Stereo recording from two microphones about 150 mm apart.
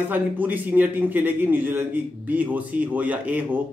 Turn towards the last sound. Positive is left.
turn(degrees=-10)  # may be behind; listen again after turning